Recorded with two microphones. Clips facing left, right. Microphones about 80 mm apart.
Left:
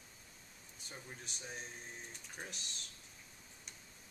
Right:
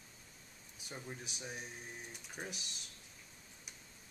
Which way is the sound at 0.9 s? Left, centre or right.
Centre.